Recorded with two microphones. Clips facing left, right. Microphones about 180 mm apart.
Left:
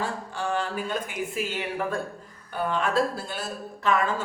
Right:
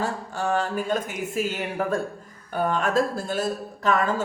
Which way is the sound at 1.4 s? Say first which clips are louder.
Right 4 dB; 45° right (ahead or behind).